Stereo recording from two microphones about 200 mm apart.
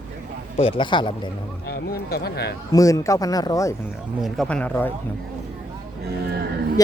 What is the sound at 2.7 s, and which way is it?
Speech, 15° left (ahead or behind).